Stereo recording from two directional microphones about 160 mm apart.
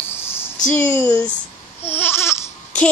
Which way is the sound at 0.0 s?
15° left (ahead or behind).